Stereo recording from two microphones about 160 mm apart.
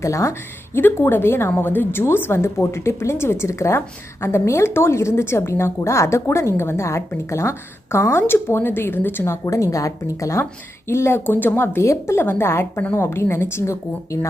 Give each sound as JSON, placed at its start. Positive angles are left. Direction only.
{"t": 0.0, "sound": "speech", "side_deg": 20}